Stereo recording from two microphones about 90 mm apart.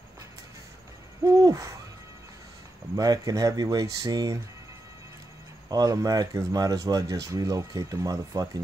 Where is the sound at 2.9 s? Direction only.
45° right (ahead or behind).